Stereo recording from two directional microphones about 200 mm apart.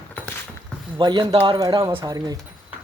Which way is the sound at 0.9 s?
25° right (ahead or behind).